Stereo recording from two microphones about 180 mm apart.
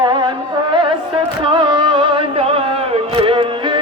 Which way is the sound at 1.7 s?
30° right (ahead or behind).